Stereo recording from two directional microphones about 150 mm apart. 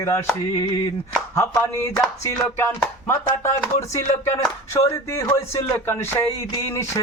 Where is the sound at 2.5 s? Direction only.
15° left (ahead or behind).